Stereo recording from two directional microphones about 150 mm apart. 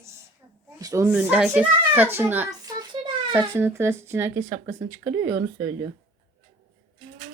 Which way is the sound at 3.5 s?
15° right (ahead or behind).